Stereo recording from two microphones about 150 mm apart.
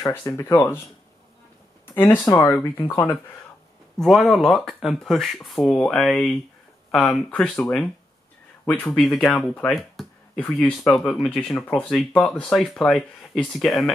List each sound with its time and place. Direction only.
0.0 s speech: 20° left (ahead or behind)
2.0 s speech: 15° left (ahead or behind)
4.0 s speech: centre (ahead or behind)